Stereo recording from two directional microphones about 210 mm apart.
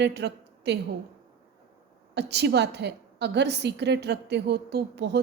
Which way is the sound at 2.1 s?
55° right (ahead or behind).